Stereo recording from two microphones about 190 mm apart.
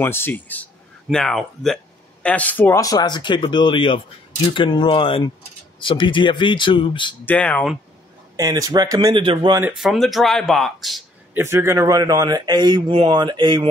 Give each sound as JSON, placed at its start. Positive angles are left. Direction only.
{"t": 0.0, "sound": "speech", "side_deg": 10}
{"t": 7.2, "sound": "speech", "side_deg": 5}
{"t": 8.4, "sound": "speech", "side_deg": -20}
{"t": 9.6, "sound": "speech", "side_deg": -5}
{"t": 11.3, "sound": "speech", "side_deg": -15}